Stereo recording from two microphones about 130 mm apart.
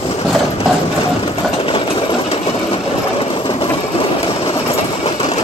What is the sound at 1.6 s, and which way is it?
Sewing machine, 40° left (ahead or behind).